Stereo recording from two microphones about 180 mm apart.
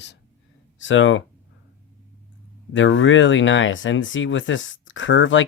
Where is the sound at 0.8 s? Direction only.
90° left.